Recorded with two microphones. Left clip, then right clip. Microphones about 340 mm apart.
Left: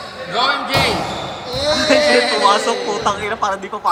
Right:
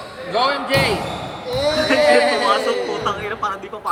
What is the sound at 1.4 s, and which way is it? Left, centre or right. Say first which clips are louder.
Bleat: right 1 dB; right.